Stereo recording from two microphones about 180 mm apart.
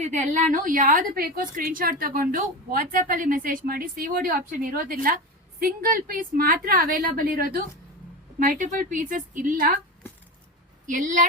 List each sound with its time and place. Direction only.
0.0 s a woman's voice: 40° right (ahead or behind)
10.8 s a woman's voice: 45° right (ahead or behind)